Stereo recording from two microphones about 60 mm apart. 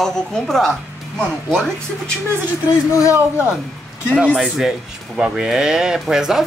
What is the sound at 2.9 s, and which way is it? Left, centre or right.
Speech, left.